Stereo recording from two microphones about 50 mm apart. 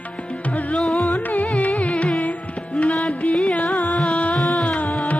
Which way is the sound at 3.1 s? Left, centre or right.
Left.